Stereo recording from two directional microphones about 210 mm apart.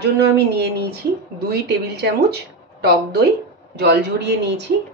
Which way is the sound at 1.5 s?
50° right (ahead or behind).